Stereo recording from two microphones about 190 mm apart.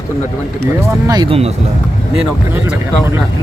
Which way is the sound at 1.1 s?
25° right (ahead or behind).